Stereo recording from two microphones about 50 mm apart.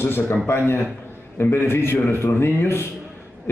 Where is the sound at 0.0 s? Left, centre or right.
Left.